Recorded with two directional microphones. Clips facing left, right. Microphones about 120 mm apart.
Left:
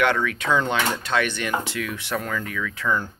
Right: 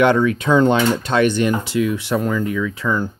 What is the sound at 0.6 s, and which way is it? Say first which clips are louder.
Speech: right 10 dB; 40° right (ahead or behind).